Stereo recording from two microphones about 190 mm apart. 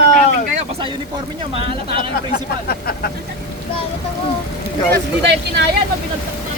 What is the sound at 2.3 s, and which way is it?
Speech, 50° left (ahead or behind).